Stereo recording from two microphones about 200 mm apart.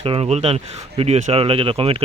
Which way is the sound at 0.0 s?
30° right (ahead or behind).